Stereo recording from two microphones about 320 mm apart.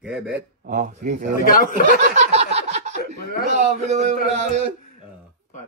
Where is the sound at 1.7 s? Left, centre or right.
Right.